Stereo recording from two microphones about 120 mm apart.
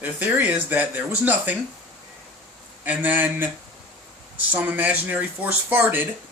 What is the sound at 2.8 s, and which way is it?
Speech, 15° right (ahead or behind).